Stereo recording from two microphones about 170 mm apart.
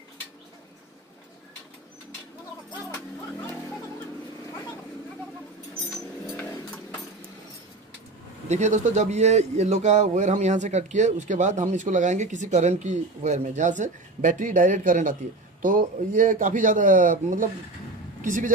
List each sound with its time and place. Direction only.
8.5 s a man's voice: 45° right (ahead or behind)